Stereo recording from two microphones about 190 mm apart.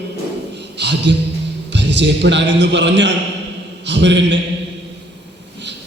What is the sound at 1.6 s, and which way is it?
A man's voice, 65° right (ahead or behind).